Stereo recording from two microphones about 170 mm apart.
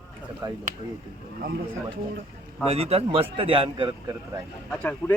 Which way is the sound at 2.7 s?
35° right (ahead or behind).